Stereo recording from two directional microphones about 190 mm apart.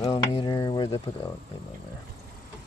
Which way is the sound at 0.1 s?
25° left (ahead or behind).